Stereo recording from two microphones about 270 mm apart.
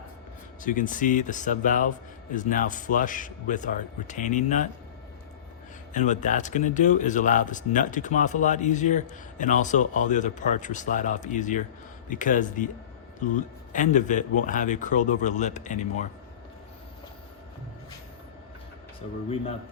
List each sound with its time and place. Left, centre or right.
0.6 s speech: left
5.9 s speech: left
13.7 s speech: left